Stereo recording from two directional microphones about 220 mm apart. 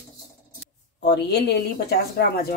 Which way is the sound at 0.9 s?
50° left (ahead or behind).